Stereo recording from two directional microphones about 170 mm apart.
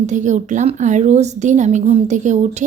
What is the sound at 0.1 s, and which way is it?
A woman's voice, 45° right (ahead or behind).